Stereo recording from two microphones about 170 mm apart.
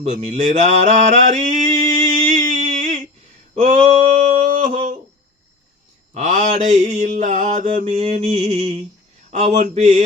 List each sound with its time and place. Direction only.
0.0 s mantra: 40° right (ahead or behind)
2.3 s a sound: 50° right (ahead or behind)
6.1 s mantra: 45° right (ahead or behind)